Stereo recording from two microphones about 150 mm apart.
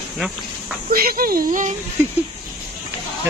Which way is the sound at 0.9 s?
75° right (ahead or behind).